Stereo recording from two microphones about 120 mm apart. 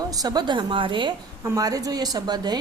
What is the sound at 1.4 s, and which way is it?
A woman's voice, 30° right (ahead or behind).